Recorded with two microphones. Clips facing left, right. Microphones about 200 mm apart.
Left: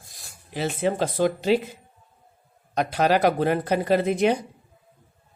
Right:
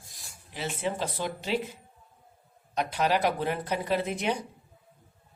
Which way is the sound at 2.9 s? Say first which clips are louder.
Left 6 dB; 85° left.